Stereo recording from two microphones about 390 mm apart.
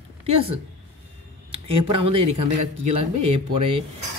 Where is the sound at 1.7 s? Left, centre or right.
Right.